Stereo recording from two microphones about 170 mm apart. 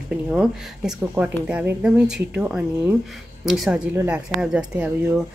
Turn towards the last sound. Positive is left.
turn(degrees=-5)  # may be behind; listen again after turning